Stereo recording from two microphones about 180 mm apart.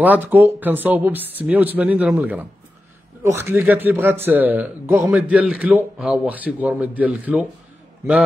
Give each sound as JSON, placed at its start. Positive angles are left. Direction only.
{"t": 0.0, "sound": "a man's voice", "side_deg": -10}